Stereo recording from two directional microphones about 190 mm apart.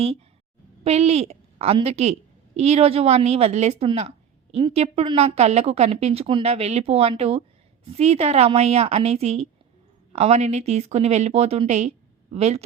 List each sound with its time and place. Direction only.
0.9 s a woman's voice: 35° right (ahead or behind)